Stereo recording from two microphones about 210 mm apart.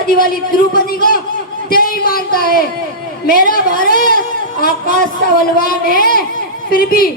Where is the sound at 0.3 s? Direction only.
45° left (ahead or behind).